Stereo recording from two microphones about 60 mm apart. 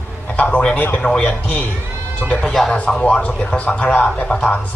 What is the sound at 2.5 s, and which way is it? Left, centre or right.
Speech, centre.